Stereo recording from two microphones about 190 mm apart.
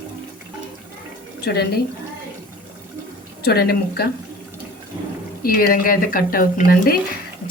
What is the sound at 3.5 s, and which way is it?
Speech, 55° left (ahead or behind).